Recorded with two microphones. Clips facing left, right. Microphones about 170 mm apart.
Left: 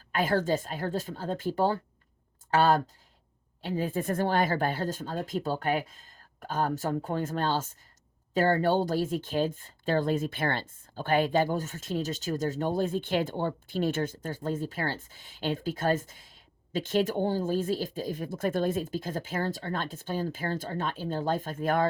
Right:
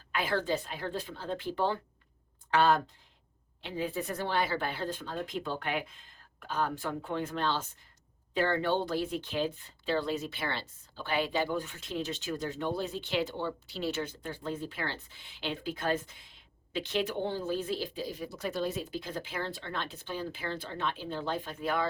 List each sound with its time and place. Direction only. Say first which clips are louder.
0.1 s speech: left 4 dB; 45° left (ahead or behind)